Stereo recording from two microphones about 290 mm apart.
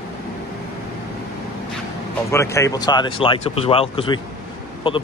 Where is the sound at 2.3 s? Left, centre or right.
Centre.